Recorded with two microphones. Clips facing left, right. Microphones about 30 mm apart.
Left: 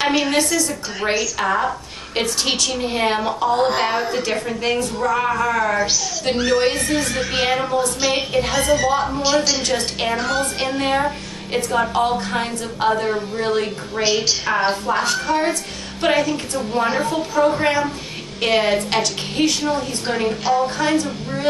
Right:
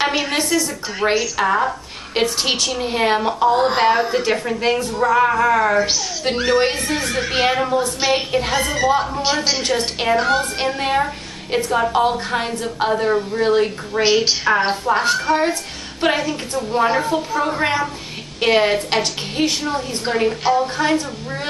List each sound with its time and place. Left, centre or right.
0.2 s a woman's voice: centre
4.7 s a woman's voice: right
8.7 s a woman's voice: centre
9.7 s a woman's voice: centre
10.4 s a woman's voice: centre
14.0 s a woman's voice: centre